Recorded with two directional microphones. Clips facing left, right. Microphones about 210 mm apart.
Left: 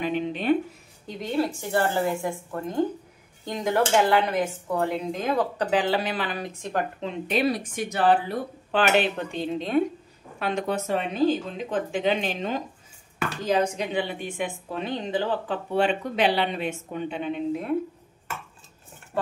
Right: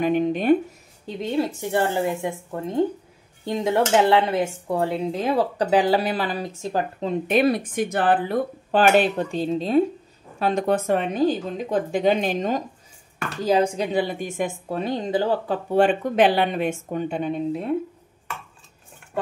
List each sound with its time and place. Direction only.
0.0 s speech: 45° right (ahead or behind)
1.3 s a woman's voice: 20° right (ahead or behind)
7.2 s speech: 55° right (ahead or behind)